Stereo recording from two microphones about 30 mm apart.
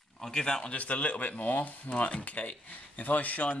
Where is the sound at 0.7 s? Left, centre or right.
Left.